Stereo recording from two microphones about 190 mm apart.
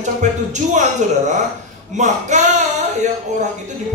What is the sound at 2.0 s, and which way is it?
Speech, 40° right (ahead or behind).